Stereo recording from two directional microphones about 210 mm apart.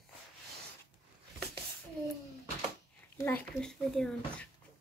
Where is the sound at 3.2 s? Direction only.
10° left (ahead or behind).